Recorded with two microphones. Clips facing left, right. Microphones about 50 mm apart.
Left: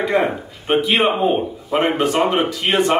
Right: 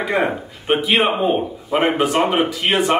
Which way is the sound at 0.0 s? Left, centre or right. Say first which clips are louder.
Left 1 dB; centre.